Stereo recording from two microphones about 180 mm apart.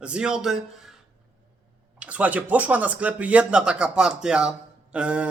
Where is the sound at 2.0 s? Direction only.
10° right (ahead or behind).